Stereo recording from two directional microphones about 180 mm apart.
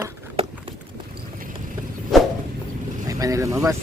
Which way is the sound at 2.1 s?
Centre (ahead or behind).